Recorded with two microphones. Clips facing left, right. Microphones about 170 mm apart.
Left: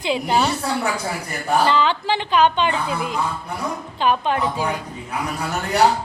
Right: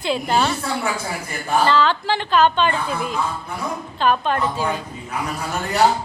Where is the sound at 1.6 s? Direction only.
15° left (ahead or behind).